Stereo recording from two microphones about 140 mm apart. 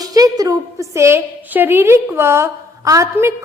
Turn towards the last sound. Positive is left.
turn(degrees=-20)  # may be behind; listen again after turning